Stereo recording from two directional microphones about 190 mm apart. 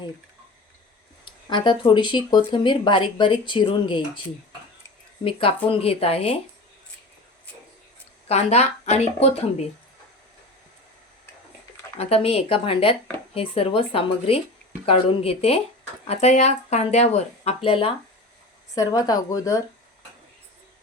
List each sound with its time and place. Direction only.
1.5 s speech: 25° left (ahead or behind)
5.2 s speech: 30° left (ahead or behind)
8.3 s speech: 35° left (ahead or behind)
11.9 s speech: 30° left (ahead or behind)